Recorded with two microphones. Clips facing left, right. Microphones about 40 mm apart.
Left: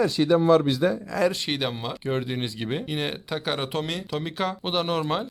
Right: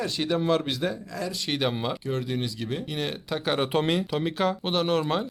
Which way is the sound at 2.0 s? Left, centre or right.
Left.